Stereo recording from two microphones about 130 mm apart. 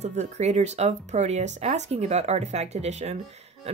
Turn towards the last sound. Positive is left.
turn(degrees=-60)  # may be behind; listen again after turning